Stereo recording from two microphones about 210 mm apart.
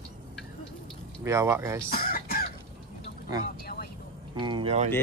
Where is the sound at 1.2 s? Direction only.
15° right (ahead or behind).